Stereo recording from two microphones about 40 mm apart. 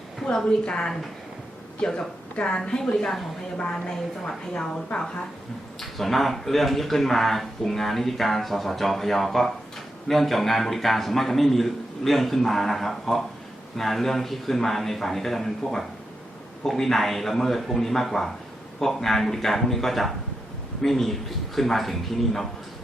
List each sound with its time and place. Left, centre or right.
0.3 s a woman's voice: left
5.8 s speech: centre